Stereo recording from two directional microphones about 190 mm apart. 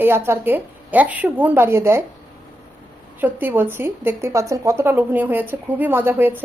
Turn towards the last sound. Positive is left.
turn(degrees=-10)  # may be behind; listen again after turning